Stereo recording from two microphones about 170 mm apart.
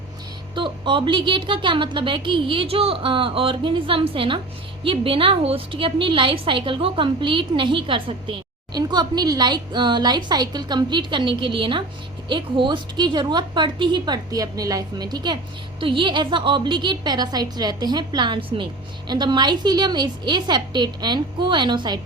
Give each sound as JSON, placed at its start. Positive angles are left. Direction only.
{"t": 0.5, "sound": "a woman's voice", "side_deg": -30}